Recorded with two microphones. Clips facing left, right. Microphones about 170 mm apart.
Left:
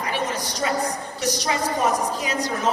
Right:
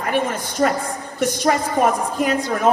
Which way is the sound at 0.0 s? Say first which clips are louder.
Right 5 dB; 50° right (ahead or behind).